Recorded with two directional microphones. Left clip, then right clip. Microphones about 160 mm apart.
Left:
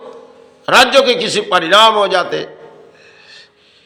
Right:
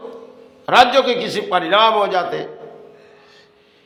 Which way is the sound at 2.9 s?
20° left (ahead or behind).